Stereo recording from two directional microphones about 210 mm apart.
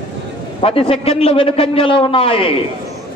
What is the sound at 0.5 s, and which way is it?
A man's voice, 25° left (ahead or behind).